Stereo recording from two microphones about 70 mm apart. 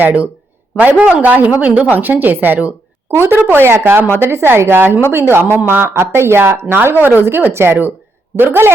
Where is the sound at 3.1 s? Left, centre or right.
Right.